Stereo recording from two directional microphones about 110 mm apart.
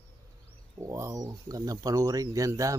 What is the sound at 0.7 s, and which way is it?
Speech, 30° right (ahead or behind).